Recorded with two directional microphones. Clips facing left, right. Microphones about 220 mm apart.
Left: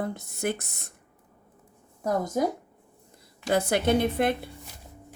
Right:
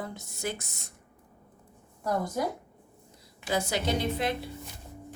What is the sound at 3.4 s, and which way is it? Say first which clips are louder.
Speech: left 6 dB; 55° left (ahead or behind).